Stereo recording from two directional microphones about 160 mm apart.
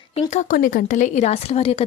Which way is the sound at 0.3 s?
55° left (ahead or behind).